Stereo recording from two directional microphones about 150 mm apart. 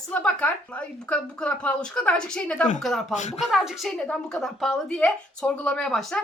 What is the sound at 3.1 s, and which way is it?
Speech, 50° left (ahead or behind).